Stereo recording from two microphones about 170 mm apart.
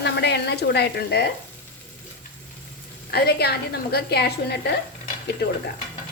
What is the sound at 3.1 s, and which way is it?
A woman's voice, 70° left (ahead or behind).